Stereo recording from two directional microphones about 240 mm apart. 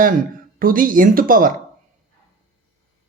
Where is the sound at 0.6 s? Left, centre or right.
Right.